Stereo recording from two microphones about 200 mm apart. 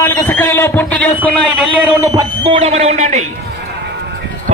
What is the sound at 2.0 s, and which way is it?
Speech, 20° right (ahead or behind).